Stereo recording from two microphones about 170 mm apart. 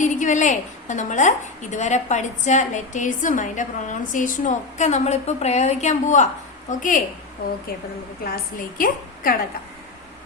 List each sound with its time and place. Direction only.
0.0 s a woman's voice: 45° left (ahead or behind)
8.5 s a woman's voice: 55° left (ahead or behind)